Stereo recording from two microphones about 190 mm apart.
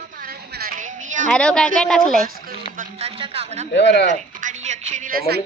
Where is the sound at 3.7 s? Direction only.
65° left (ahead or behind).